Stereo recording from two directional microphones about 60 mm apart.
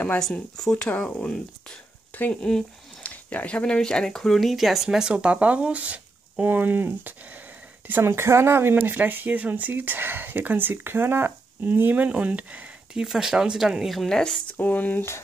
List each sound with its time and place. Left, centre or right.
0.6 s speech: centre
2.1 s speech: left; by 7.2 s right
8.0 s speech: right
13.0 s speech: centre
14.0 s speech: centre
14.5 s speech: left